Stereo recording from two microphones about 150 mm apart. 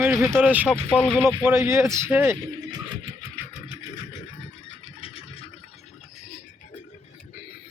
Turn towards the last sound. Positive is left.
turn(degrees=40)  # may be behind; listen again after turning